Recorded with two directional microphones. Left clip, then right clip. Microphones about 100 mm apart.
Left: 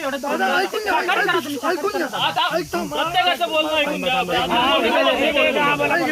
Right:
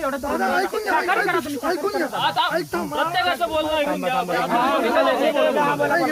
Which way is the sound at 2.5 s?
30° right (ahead or behind).